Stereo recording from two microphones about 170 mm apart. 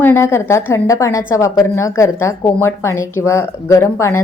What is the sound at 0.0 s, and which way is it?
A woman's voice, 15° left (ahead or behind).